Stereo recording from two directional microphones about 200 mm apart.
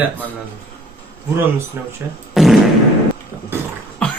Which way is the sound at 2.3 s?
Centre (ahead or behind).